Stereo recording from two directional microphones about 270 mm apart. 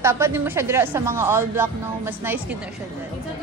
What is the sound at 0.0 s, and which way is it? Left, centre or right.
Speech, centre.